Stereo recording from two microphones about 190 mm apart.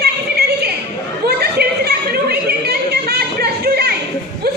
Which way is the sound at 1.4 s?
55° right (ahead or behind).